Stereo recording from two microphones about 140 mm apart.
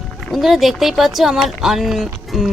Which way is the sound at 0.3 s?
Centre (ahead or behind).